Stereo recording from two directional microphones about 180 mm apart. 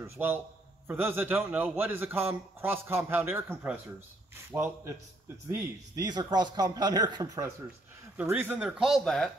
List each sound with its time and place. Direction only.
0.0 s a man's voice: 10° right (ahead or behind)